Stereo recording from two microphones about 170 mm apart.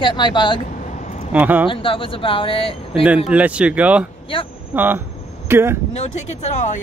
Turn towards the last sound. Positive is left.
turn(degrees=40)  # may be behind; listen again after turning